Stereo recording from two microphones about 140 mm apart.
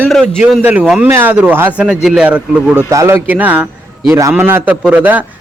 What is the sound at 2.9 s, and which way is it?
A man's voice, 20° right (ahead or behind).